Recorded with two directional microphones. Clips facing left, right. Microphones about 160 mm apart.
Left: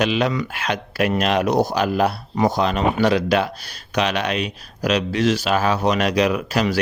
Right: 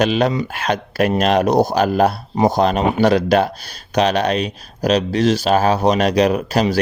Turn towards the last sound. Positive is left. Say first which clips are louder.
# right 4 dB
turn(degrees=-35)  # may be behind; listen again after turning